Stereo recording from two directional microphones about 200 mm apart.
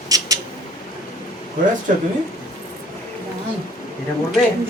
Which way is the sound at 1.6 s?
40° right (ahead or behind).